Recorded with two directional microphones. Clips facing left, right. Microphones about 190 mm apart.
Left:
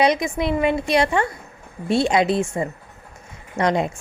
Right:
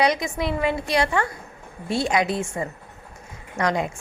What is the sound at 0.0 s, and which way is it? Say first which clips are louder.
A woman's voice: left 3 dB; 20° left (ahead or behind).